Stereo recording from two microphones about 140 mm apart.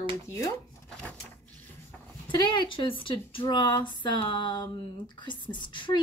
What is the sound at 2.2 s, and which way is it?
Speech, 35° left (ahead or behind).